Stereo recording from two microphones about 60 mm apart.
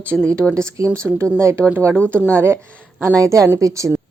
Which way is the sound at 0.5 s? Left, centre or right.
Right.